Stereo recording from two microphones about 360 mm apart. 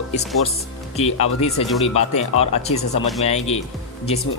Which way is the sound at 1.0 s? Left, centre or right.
Centre.